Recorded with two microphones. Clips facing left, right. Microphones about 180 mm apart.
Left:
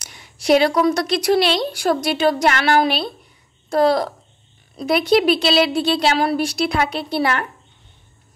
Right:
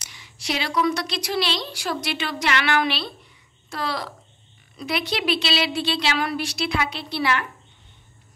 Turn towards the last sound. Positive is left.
turn(degrees=50)  # may be behind; listen again after turning